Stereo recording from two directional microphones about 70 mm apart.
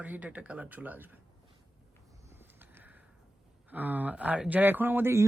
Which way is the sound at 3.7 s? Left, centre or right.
Right.